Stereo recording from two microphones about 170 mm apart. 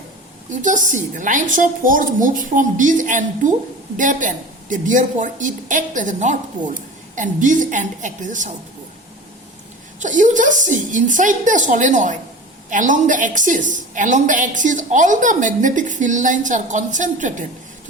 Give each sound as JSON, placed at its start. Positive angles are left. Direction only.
{"t": 0.5, "sound": "a woman's voice", "side_deg": -50}
{"t": 10.0, "sound": "a woman's voice", "side_deg": -50}